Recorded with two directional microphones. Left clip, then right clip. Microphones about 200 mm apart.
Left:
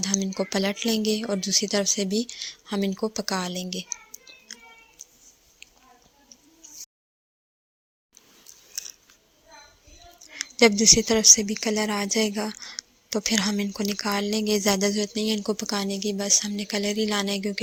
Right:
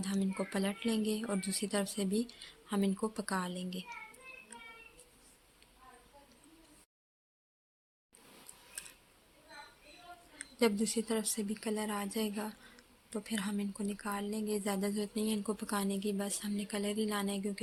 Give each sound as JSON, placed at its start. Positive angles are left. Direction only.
{"t": 0.0, "sound": "a woman's voice", "side_deg": 30}
{"t": 10.3, "sound": "speech", "side_deg": 35}